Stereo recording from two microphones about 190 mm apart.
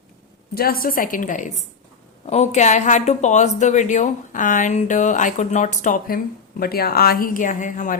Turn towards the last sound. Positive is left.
turn(degrees=45)  # may be behind; listen again after turning